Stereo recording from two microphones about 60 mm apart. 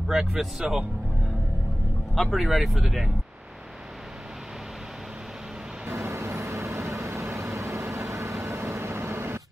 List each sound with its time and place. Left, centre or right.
0.1 s speech: centre
2.3 s speech: centre
5.9 s vehicle: right